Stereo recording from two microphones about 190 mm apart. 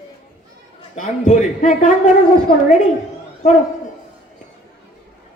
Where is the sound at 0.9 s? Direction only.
40° left (ahead or behind).